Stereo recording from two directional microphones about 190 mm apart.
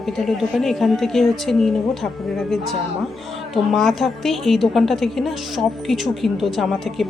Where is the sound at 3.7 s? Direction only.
Centre (ahead or behind).